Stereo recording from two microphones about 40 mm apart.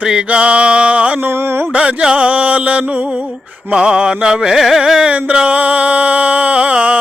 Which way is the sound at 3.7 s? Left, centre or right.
Right.